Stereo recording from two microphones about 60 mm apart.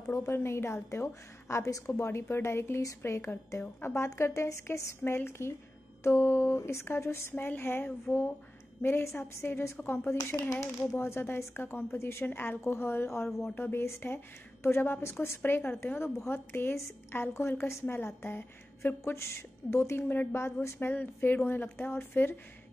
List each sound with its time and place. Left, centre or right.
0.1 s speech: left
4.3 s a woman's voice: left
4.6 s speech: left
7.3 s a woman's voice: left
10.5 s speech: left
12.3 s a woman's voice: left
20.6 s a woman's voice: left